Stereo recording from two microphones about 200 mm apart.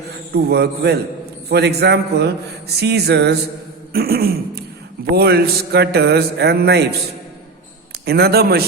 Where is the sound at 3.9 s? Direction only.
50° right (ahead or behind).